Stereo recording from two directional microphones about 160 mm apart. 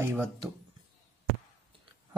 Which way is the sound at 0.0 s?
15° right (ahead or behind).